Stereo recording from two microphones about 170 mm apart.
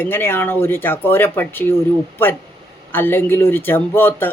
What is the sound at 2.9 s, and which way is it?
A man's voice, 10° left (ahead or behind).